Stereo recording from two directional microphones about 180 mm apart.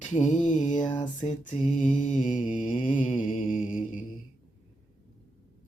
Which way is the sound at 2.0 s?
45° left (ahead or behind).